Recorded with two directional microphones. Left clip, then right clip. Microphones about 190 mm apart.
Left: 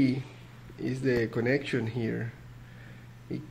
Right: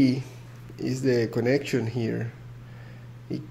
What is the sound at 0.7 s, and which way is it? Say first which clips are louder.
Speech: right 4 dB; 15° right (ahead or behind).